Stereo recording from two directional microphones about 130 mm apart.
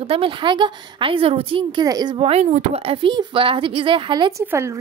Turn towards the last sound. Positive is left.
turn(degrees=-20)  # may be behind; listen again after turning